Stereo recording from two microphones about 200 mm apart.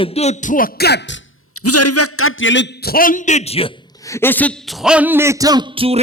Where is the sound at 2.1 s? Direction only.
90° left; by 3.7 s 30° left (ahead or behind).